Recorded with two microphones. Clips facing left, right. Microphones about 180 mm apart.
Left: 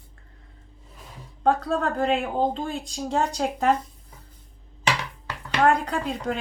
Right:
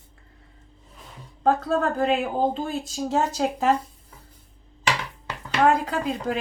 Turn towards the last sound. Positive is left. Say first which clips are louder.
# right 1 dB
turn(degrees=0)  # may be behind; listen again after turning